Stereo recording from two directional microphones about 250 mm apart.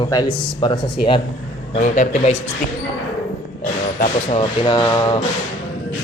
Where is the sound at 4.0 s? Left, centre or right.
Left.